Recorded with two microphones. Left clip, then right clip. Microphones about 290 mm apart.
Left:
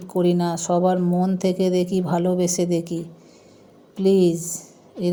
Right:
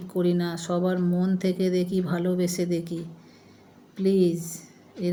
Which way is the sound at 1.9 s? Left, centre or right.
Centre.